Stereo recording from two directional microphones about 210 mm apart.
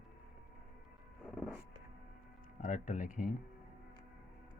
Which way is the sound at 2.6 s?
35° left (ahead or behind).